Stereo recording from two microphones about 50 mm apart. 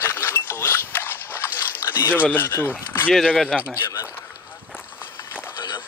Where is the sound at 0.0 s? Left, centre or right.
Left.